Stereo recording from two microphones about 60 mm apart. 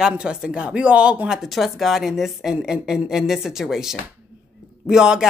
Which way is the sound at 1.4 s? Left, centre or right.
Centre.